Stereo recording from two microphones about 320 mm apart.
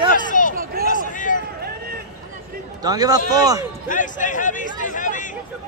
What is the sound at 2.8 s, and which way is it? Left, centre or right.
Speech, centre.